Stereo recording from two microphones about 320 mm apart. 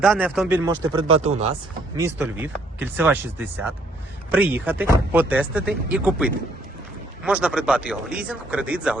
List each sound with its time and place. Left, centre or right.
0.0 s speech: centre
2.0 s speech: centre